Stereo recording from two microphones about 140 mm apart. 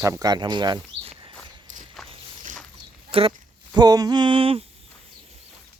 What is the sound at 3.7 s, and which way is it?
Speech, 30° right (ahead or behind).